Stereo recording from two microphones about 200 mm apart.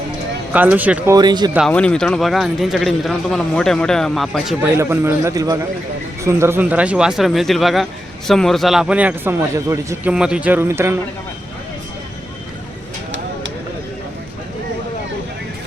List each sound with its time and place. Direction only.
0.5 s a man's voice: 10° right (ahead or behind)
1.1 s speech: 20° right (ahead or behind)
1.5 s speech: 5° left (ahead or behind)
4.8 s a man's voice: 15° right (ahead or behind)